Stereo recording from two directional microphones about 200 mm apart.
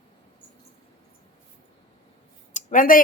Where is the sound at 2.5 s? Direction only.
40° left (ahead or behind).